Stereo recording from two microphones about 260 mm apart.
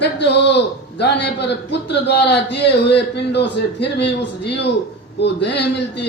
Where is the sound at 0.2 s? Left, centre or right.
Left.